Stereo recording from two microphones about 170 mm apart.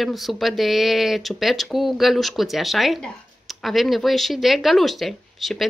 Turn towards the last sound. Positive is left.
turn(degrees=0)  # may be behind; listen again after turning